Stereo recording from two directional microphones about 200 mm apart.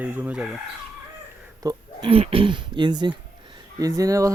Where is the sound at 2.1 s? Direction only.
30° right (ahead or behind).